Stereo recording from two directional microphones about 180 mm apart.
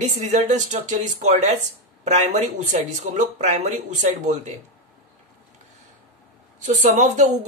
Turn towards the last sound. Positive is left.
turn(degrees=-40)  # may be behind; listen again after turning